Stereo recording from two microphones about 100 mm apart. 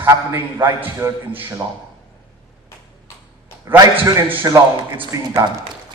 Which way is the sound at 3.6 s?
20° right (ahead or behind).